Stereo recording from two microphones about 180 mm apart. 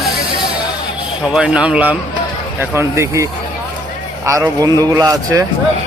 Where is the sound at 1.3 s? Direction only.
5° right (ahead or behind).